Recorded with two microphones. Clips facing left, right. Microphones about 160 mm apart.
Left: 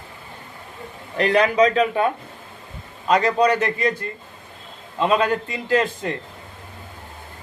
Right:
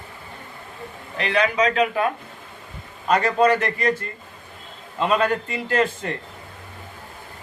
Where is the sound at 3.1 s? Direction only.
20° left (ahead or behind).